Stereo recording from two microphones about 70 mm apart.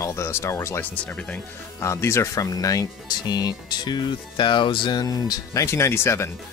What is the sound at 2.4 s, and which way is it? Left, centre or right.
Speech, left.